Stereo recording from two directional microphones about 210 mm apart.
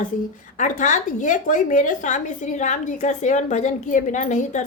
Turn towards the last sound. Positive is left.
turn(degrees=35)  # may be behind; listen again after turning